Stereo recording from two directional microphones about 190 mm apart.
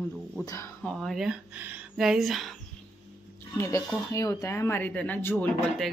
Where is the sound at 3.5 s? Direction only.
15° left (ahead or behind).